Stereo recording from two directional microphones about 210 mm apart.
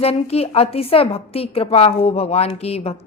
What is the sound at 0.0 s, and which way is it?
A woman's voice, 30° left (ahead or behind).